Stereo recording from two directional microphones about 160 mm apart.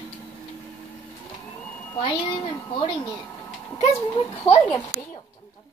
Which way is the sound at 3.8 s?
40° left (ahead or behind).